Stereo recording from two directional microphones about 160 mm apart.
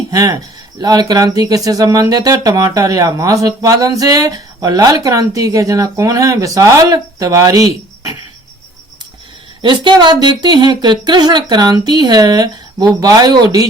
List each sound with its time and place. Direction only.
0.1 s speech: 25° right (ahead or behind)
9.6 s speech: 30° right (ahead or behind)